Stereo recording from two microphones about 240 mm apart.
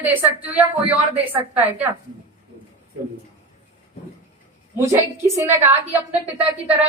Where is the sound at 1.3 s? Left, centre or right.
Centre.